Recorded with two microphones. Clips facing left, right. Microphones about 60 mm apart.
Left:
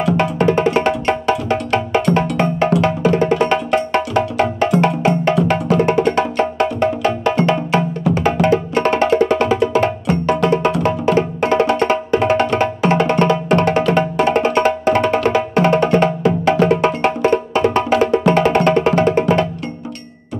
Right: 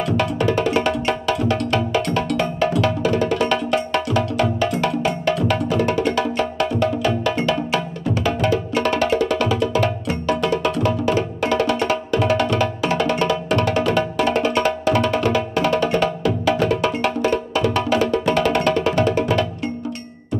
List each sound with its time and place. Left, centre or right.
0.2 s music: left